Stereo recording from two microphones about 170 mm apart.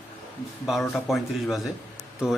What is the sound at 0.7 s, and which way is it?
Speech, centre (ahead or behind).